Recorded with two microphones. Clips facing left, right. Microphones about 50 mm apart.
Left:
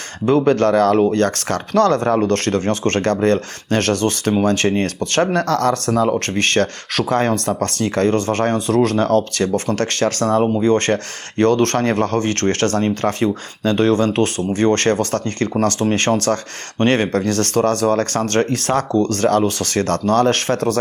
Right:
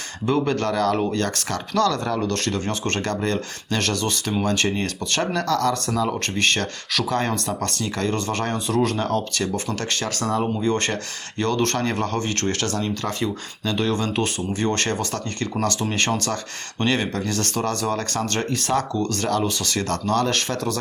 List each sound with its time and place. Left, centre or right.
0.3 s speech: left